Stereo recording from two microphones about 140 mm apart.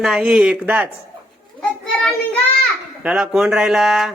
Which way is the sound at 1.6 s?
5° left (ahead or behind).